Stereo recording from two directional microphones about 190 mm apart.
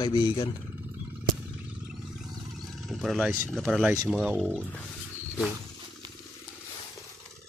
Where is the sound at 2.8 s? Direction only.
Centre (ahead or behind).